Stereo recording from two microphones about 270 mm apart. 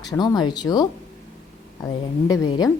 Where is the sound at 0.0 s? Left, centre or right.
Centre.